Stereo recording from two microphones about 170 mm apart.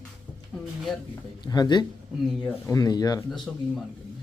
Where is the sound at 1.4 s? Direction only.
25° left (ahead or behind).